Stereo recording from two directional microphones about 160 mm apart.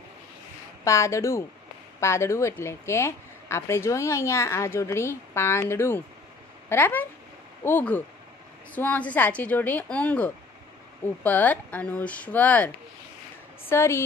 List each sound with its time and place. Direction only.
0.8 s a woman's voice: 20° left (ahead or behind)